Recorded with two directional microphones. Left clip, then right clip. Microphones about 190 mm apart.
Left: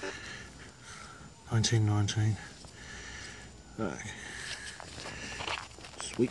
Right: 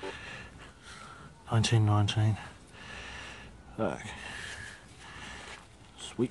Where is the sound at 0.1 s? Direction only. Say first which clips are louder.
Even; 20° right (ahead or behind).